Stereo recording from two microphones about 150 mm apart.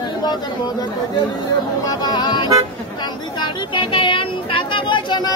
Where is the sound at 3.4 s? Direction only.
35° left (ahead or behind).